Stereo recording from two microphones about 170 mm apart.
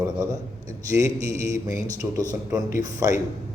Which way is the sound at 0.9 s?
20° right (ahead or behind).